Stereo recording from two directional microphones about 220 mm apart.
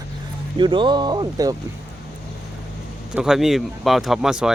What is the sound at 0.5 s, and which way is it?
Speech, 20° right (ahead or behind).